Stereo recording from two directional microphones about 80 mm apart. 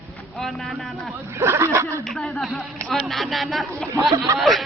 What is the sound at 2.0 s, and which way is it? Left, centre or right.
Speech, centre.